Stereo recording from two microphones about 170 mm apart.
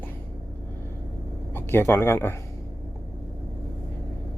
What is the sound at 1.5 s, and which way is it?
Speech, 15° left (ahead or behind).